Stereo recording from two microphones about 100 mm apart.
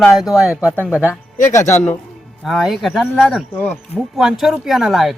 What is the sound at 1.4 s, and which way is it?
Speech, 30° left (ahead or behind).